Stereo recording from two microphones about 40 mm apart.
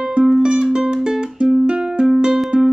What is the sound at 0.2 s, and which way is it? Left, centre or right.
Music, centre.